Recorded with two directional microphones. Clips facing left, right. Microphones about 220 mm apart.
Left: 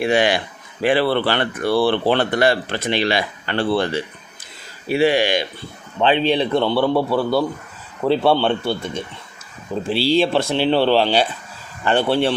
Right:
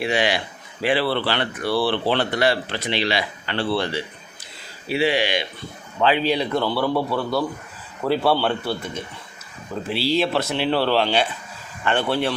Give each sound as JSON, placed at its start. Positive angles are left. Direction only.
{"t": 0.0, "sound": "speech", "side_deg": 50}
{"t": 6.0, "sound": "speech", "side_deg": 25}
{"t": 9.8, "sound": "speech", "side_deg": 30}